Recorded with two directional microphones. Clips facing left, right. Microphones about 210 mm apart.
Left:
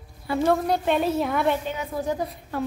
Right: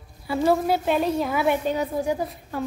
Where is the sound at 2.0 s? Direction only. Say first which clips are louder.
Right 2 dB; 15° right (ahead or behind).